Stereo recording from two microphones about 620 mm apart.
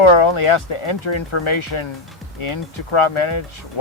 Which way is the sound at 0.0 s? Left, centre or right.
Left.